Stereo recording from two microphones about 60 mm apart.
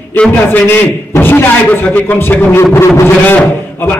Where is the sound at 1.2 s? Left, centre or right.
Left.